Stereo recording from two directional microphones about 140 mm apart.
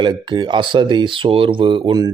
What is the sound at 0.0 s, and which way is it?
Speech, 35° right (ahead or behind).